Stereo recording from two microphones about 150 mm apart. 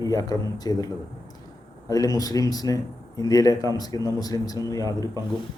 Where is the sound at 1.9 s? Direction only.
25° left (ahead or behind).